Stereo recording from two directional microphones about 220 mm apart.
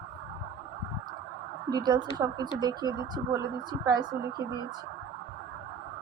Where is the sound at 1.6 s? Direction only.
15° right (ahead or behind).